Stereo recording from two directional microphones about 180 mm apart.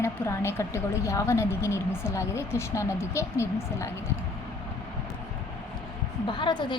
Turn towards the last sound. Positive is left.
turn(degrees=25)  # may be behind; listen again after turning